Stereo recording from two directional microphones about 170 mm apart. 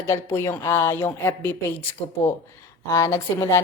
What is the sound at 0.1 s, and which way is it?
A woman's voice, 15° left (ahead or behind).